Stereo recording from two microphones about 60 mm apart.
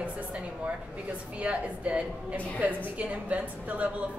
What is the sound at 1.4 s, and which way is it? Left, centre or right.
A woman's voice, right.